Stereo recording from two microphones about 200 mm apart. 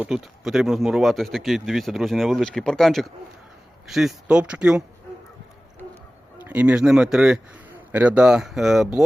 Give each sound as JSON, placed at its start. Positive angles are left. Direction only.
{"t": 0.0, "sound": "speech", "side_deg": 0}
{"t": 6.4, "sound": "speech", "side_deg": -10}